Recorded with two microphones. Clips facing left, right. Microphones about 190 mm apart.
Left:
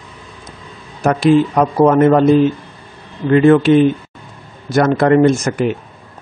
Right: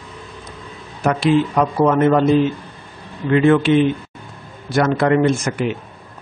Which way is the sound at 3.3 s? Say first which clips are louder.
Left 4 dB; 40° left (ahead or behind).